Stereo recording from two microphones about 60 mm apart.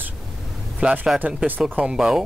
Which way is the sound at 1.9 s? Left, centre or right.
Centre.